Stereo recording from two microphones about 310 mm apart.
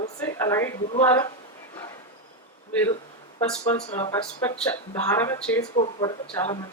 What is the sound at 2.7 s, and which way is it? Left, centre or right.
Speech, centre.